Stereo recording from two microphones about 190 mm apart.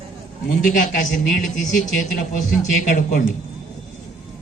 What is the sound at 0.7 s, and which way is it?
Speech, 45° left (ahead or behind).